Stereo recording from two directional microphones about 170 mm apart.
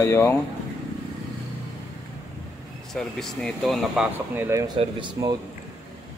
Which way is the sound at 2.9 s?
Centre (ahead or behind).